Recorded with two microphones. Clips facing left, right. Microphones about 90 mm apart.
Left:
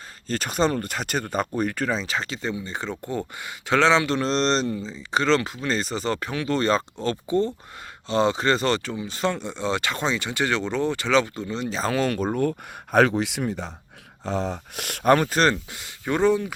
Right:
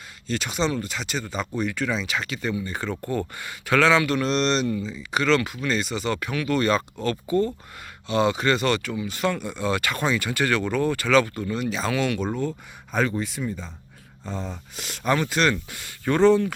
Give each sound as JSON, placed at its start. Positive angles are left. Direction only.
{"t": 0.3, "sound": "speech", "side_deg": 45}
{"t": 12.4, "sound": "speech", "side_deg": 60}
{"t": 15.7, "sound": "speech", "side_deg": 20}